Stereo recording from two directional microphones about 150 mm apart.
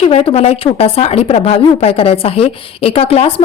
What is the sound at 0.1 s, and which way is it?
Speech, 40° left (ahead or behind).